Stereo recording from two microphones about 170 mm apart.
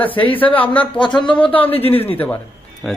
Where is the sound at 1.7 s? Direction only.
35° left (ahead or behind).